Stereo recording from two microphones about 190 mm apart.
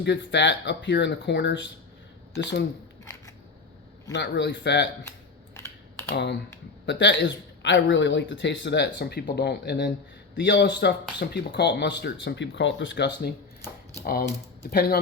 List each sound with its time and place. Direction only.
0.0 s speech: 65° left (ahead or behind)
3.0 s single-lens reflex camera: 15° left (ahead or behind)
4.1 s speech: 70° left (ahead or behind)
5.5 s computer keyboard: 15° left (ahead or behind)
6.1 s speech: 65° left (ahead or behind)
14.0 s speech: 50° left (ahead or behind)